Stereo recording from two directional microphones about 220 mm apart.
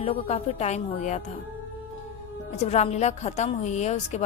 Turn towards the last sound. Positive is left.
turn(degrees=30)  # may be behind; listen again after turning